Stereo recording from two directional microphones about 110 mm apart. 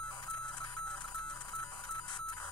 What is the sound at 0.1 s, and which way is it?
Music, 40° left (ahead or behind).